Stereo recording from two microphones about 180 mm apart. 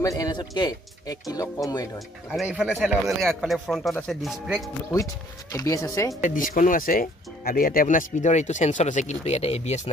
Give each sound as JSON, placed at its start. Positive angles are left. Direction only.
{"t": 0.0, "sound": "speech", "side_deg": 20}
{"t": 2.3, "sound": "speech", "side_deg": -5}
{"t": 4.9, "sound": "speech", "side_deg": 20}
{"t": 6.2, "sound": "speech", "side_deg": 50}